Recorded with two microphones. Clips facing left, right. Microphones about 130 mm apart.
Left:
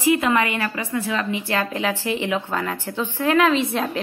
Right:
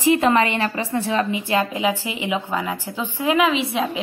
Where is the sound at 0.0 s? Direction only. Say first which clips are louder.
Right 2 dB; 30° right (ahead or behind).